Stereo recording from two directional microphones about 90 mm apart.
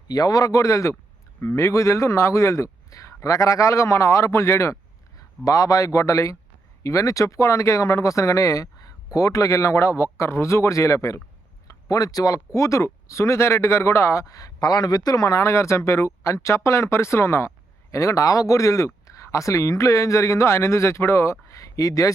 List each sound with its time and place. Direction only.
0.1 s speech: 45° left (ahead or behind)